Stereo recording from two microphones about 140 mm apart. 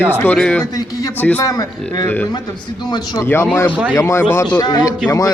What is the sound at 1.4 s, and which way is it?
Speech, 25° left (ahead or behind).